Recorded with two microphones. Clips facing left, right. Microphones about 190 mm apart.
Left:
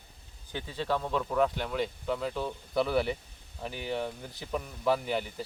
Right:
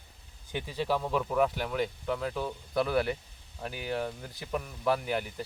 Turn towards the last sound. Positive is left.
turn(degrees=0)  # may be behind; listen again after turning